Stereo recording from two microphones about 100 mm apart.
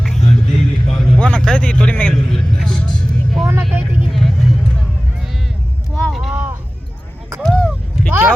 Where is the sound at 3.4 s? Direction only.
25° right (ahead or behind).